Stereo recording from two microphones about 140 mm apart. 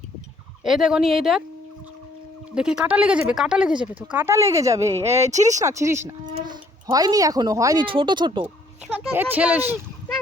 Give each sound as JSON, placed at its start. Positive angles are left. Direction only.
{"t": 0.6, "sound": "speech", "side_deg": -5}
{"t": 2.6, "sound": "speech", "side_deg": -5}
{"t": 4.1, "sound": "speech", "side_deg": -15}
{"t": 5.0, "sound": "speech", "side_deg": -50}
{"t": 5.5, "sound": "speech", "side_deg": -20}
{"t": 7.9, "sound": "speech", "side_deg": -35}
{"t": 9.1, "sound": "speech", "side_deg": -15}